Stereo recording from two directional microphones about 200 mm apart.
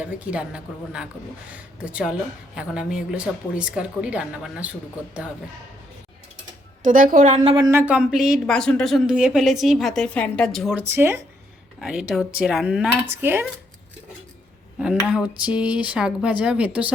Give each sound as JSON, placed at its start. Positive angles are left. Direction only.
{"t": 0.0, "sound": "speech", "side_deg": -5}
{"t": 6.8, "sound": "a woman's voice", "side_deg": -45}
{"t": 7.5, "sound": "speech", "side_deg": -15}
{"t": 14.8, "sound": "speech", "side_deg": -5}